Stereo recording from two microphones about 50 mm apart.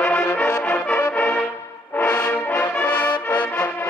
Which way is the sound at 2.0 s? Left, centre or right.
Left.